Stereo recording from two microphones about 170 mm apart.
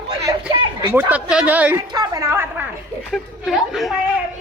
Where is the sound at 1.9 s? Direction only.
20° right (ahead or behind).